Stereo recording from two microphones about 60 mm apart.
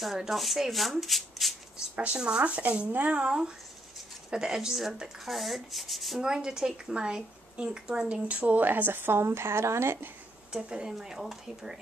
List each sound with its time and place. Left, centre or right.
0.0 s speech: centre
1.8 s speech: centre; by 10.0 s right
10.5 s speech: centre